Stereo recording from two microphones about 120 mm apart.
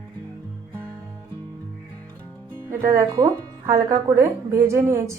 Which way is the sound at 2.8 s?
25° right (ahead or behind).